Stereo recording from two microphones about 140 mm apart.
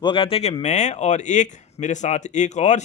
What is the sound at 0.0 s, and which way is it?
Speech, 40° left (ahead or behind).